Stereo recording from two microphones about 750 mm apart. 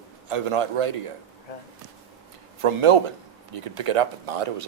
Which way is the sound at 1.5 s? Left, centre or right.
Left.